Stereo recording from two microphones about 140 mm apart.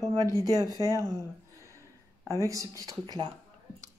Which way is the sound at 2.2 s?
20° right (ahead or behind).